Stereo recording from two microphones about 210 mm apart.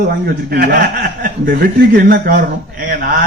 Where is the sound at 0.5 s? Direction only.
45° right (ahead or behind).